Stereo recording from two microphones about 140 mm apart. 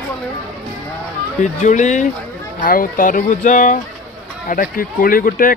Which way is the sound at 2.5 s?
75° left (ahead or behind).